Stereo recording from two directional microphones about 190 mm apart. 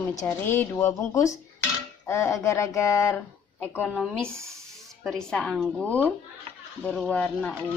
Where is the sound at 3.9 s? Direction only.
Centre (ahead or behind).